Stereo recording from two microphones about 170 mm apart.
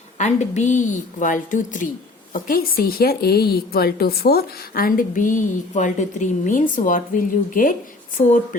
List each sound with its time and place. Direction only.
0.2 s a woman's voice: 45° left (ahead or behind)